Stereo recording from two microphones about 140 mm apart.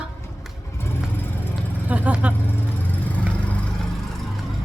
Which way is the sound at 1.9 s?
10° right (ahead or behind).